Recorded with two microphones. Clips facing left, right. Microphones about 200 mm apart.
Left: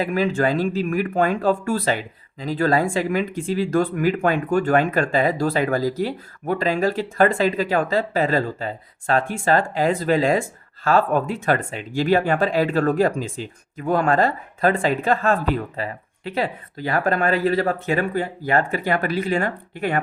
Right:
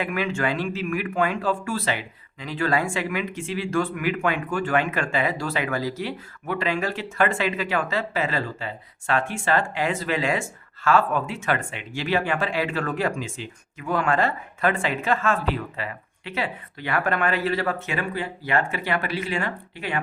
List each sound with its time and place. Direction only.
0.0 s speech: 35° left (ahead or behind)